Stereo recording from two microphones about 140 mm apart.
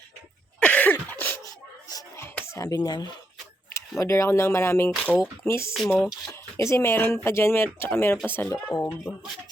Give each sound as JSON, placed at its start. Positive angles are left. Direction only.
{"t": 0.6, "sound": "a sound", "side_deg": 10}
{"t": 3.7, "sound": "speech", "side_deg": 20}
{"t": 6.0, "sound": "speech", "side_deg": 0}
{"t": 6.6, "sound": "speech", "side_deg": 20}